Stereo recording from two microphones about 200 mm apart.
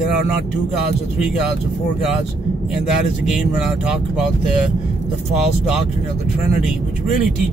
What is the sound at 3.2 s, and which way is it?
Speech, 5° right (ahead or behind).